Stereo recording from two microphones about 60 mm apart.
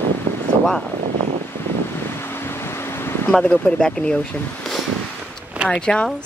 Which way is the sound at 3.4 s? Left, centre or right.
Left.